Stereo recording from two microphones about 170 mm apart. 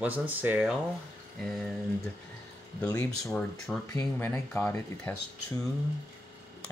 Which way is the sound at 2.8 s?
15° left (ahead or behind).